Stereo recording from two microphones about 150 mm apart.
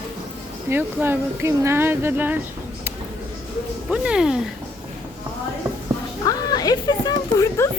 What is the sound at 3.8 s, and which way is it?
Speech, 5° right (ahead or behind).